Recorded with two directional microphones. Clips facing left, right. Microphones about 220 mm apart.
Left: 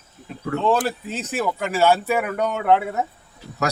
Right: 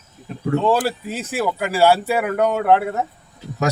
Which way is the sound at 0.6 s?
10° right (ahead or behind).